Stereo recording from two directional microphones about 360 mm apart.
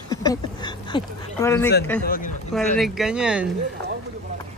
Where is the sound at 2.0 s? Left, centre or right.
Left.